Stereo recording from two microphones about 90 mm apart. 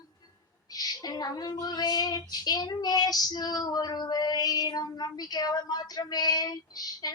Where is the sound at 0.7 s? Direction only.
50° left (ahead or behind).